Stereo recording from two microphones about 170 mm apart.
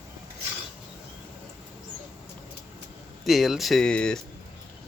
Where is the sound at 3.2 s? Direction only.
Centre (ahead or behind).